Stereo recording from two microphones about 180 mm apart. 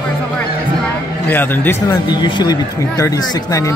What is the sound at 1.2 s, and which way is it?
Speech, 10° left (ahead or behind).